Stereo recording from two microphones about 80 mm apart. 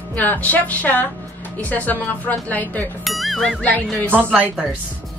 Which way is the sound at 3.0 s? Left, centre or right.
Centre.